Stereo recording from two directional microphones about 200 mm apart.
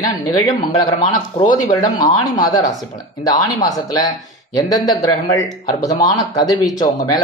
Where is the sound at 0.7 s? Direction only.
20° left (ahead or behind).